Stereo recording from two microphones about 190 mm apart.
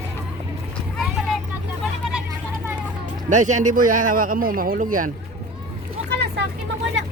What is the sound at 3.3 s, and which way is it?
Speech, 40° right (ahead or behind).